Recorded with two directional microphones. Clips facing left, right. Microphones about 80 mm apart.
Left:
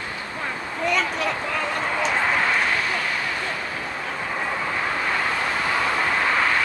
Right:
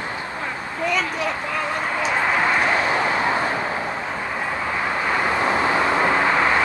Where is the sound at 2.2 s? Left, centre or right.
Centre.